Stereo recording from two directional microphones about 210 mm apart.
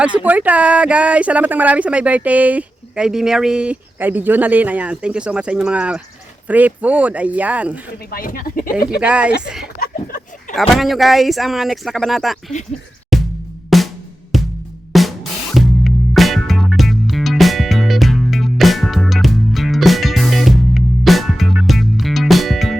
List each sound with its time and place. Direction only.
0.0 s speech: 5° right (ahead or behind)
8.1 s speech: 45° left (ahead or behind)
9.0 s speech: 5° right (ahead or behind)
13.1 s music: centre (ahead or behind)